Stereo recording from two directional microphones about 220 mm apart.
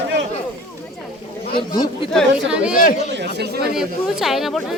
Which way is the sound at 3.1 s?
50° right (ahead or behind).